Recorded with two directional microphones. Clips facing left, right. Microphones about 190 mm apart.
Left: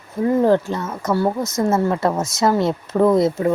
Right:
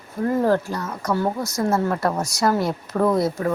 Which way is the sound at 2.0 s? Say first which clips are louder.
Left 3 dB; 25° left (ahead or behind).